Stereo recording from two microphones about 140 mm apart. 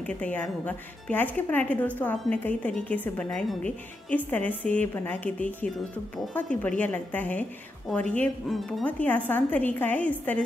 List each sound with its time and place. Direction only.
0.0 s speech: 10° left (ahead or behind)
8.8 s speech: 10° left (ahead or behind)